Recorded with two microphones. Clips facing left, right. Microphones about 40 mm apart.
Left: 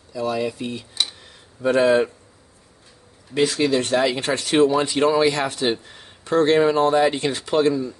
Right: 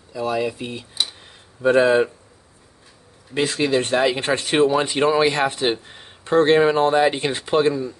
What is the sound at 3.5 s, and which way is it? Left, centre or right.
Speech, right.